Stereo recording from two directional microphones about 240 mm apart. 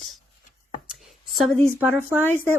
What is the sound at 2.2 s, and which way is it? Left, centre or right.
Speech, centre.